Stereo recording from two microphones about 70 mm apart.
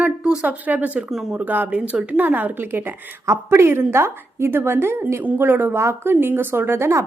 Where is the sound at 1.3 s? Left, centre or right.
Right.